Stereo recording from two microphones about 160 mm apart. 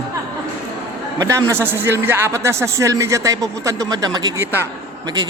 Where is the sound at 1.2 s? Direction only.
20° right (ahead or behind).